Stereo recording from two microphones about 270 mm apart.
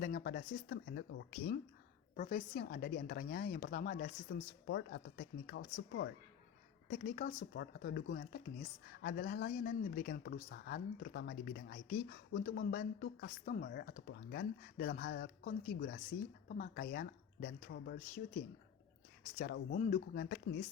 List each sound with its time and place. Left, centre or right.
0.0 s a woman's voice: left
4.6 s a woman's voice: left
19.4 s a woman's voice: left